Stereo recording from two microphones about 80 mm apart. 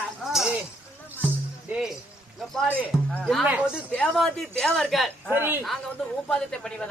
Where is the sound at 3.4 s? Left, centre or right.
Centre.